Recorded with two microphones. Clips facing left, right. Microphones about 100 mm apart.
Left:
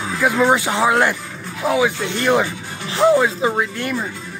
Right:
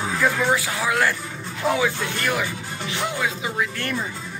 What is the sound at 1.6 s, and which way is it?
Speech, 5° left (ahead or behind).